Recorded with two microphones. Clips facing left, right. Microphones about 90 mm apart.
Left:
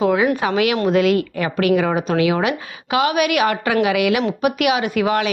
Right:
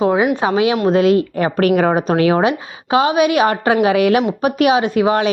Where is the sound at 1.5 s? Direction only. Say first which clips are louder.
Right 3 dB; 45° right (ahead or behind).